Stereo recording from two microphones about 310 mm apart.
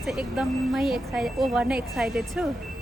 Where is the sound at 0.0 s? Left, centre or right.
Centre.